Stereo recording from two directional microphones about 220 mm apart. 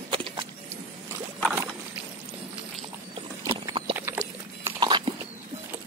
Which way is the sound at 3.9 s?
10° right (ahead or behind).